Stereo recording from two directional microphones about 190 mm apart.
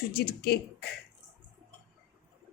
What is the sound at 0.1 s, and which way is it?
Speech, 55° left (ahead or behind).